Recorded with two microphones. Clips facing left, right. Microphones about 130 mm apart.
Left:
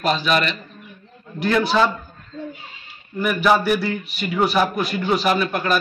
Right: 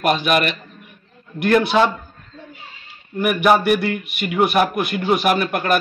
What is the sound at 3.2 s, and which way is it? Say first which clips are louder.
Speech: right 2 dB; 60° right (ahead or behind).